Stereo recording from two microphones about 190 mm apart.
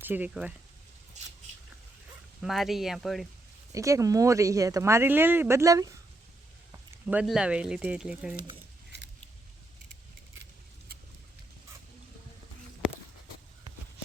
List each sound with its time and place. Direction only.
0.0 s speech: 10° right (ahead or behind)
2.4 s speech: centre (ahead or behind)
3.7 s speech: 15° right (ahead or behind)